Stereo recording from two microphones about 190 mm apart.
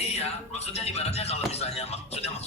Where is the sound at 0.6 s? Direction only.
35° left (ahead or behind).